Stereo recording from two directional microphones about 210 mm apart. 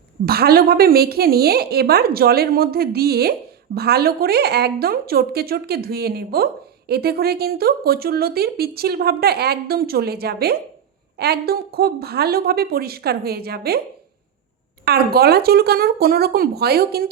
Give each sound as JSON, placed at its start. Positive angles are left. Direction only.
{"t": 0.3, "sound": "a woman's voice", "side_deg": -45}
{"t": 14.8, "sound": "a woman's voice", "side_deg": -50}